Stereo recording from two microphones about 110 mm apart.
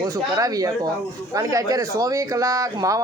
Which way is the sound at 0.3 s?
30° right (ahead or behind).